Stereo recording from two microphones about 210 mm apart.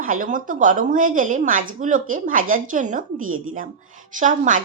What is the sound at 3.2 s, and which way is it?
Speech, 75° right (ahead or behind).